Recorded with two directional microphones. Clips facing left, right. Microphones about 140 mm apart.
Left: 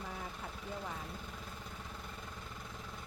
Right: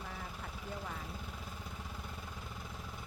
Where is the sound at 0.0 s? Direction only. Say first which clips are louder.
Left 1 dB; centre (ahead or behind).